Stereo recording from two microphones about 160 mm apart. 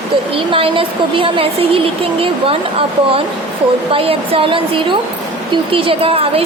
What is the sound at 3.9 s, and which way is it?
Speech, 35° right (ahead or behind).